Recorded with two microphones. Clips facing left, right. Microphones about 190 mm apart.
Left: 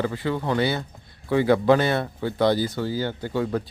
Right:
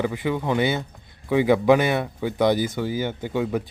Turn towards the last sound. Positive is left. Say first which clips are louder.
# right 1 dB
turn(degrees=-10)  # may be behind; listen again after turning